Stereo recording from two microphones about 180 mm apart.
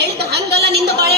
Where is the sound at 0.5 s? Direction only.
65° right (ahead or behind).